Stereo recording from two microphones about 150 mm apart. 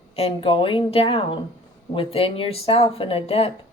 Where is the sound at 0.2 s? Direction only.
35° left (ahead or behind).